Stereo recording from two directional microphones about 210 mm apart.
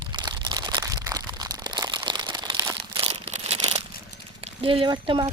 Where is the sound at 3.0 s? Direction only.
30° right (ahead or behind).